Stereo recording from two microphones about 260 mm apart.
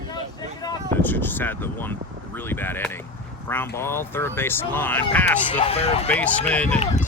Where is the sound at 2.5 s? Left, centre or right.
Centre.